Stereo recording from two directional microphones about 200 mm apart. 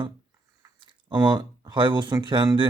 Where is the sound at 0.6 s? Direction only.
20° right (ahead or behind).